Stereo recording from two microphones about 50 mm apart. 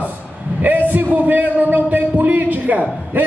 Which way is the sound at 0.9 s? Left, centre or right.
Right.